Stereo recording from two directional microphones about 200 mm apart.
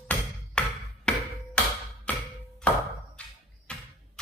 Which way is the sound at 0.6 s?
5° left (ahead or behind).